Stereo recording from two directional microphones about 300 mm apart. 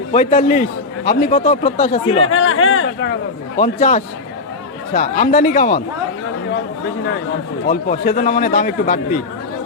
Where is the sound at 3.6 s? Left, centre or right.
Left.